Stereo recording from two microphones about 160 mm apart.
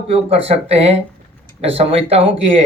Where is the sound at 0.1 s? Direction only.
40° right (ahead or behind).